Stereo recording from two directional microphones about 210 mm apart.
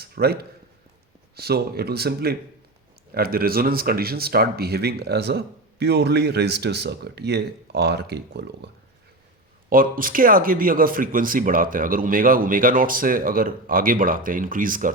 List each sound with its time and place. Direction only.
0.0 s speech: 50° right (ahead or behind)